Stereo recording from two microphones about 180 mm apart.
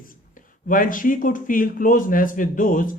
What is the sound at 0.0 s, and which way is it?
Speech, 50° left (ahead or behind).